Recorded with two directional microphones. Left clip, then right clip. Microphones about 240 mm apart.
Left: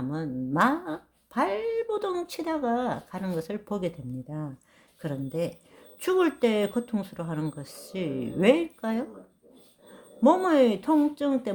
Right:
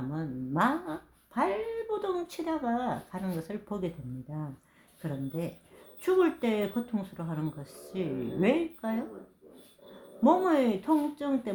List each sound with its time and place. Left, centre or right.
0.1 s a sound: left
5.0 s speech: left
10.2 s speech: left